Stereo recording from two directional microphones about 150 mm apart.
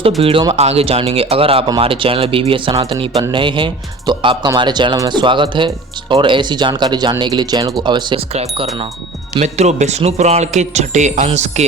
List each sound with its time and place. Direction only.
0.2 s speech: 40° right (ahead or behind)